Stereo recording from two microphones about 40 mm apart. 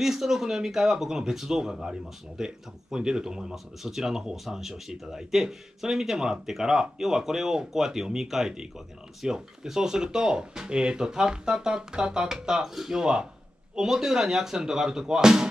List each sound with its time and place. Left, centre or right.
0.0 s speech: centre
13.0 s speech: centre